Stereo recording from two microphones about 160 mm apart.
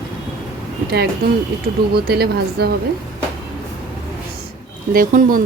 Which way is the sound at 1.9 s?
80° right.